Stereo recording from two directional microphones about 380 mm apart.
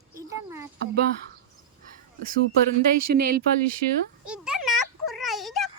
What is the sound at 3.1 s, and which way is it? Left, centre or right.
Speech, right.